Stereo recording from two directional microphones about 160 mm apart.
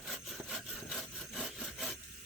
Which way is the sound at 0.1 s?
Centre (ahead or behind).